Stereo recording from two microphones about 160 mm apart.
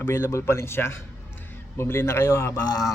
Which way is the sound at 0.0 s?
15° left (ahead or behind).